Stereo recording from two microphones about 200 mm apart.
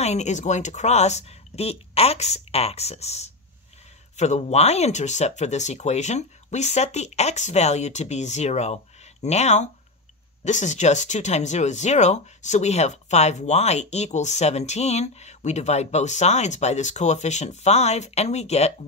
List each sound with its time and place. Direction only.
0.0 s speech: 35° left (ahead or behind)